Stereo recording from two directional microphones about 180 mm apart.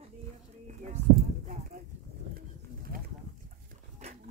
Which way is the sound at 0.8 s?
40° right (ahead or behind).